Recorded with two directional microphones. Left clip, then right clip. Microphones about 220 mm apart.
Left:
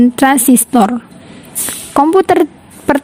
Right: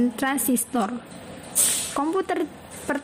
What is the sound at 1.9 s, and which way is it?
Speech, 40° left (ahead or behind).